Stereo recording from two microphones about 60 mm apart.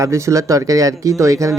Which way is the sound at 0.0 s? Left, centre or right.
Right.